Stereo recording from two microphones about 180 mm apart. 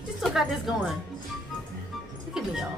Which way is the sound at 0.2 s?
Centre (ahead or behind).